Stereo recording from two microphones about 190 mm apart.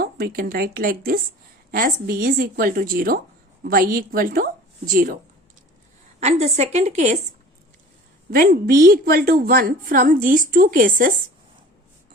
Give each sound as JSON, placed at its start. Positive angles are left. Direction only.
{"t": 0.0, "sound": "a woman's voice", "side_deg": -50}
{"t": 6.1, "sound": "a woman's voice", "side_deg": -35}
{"t": 8.3, "sound": "a woman's voice", "side_deg": -50}